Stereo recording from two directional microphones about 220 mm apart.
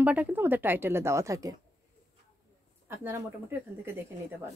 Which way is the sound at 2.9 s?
10° right (ahead or behind).